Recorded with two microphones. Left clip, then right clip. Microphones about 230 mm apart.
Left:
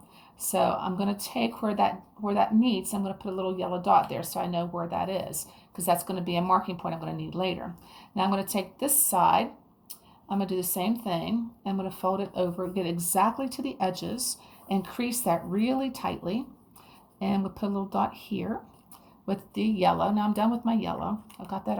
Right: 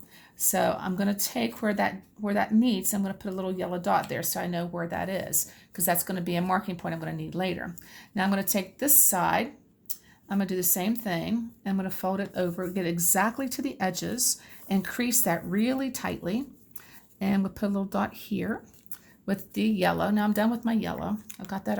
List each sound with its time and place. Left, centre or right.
0.5 s speech: right
17.7 s speech: right
21.4 s speech: right